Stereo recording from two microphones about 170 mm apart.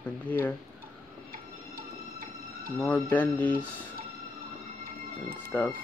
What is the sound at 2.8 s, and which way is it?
Speech, 10° left (ahead or behind).